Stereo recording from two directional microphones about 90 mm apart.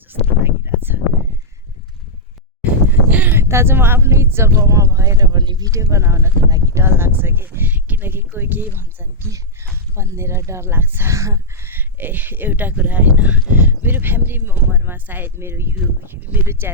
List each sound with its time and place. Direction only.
0.4 s a sound: 25° right (ahead or behind)
2.9 s speech: 20° right (ahead or behind); by 5.2 s 35° right (ahead or behind)
5.2 s speech: 55° right (ahead or behind); by 6.8 s 35° right (ahead or behind)
6.8 s speech: 25° right (ahead or behind)